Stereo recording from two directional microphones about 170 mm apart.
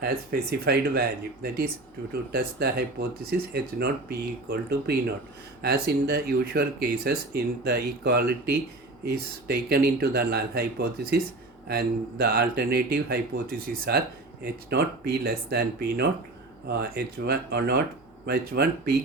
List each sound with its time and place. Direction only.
0.0 s speech: 60° right (ahead or behind)
14.4 s speech: 70° right (ahead or behind)